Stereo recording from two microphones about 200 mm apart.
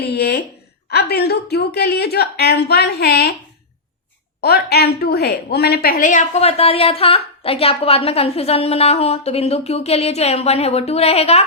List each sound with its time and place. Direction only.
0.0 s a sound: 55° left (ahead or behind)
0.9 s speech: 55° left (ahead or behind)
4.4 s a woman's voice: 55° left (ahead or behind); by 11.4 s 30° left (ahead or behind)